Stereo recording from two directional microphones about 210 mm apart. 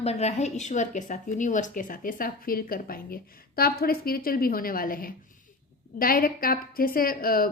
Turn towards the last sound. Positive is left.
turn(degrees=45)  # may be behind; listen again after turning